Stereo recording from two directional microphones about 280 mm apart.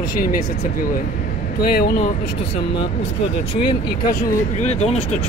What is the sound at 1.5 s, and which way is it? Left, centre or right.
Speech, left.